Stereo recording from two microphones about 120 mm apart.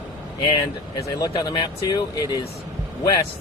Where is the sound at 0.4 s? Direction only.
30° left (ahead or behind).